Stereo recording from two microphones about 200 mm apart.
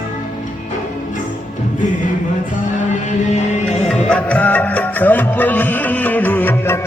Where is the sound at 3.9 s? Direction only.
5° left (ahead or behind).